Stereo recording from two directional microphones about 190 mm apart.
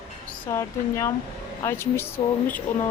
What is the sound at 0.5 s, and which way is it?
A woman's voice, 15° left (ahead or behind).